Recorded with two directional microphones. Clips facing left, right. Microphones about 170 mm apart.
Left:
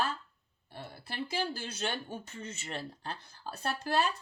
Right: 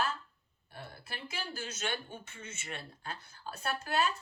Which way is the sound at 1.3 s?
30° left (ahead or behind).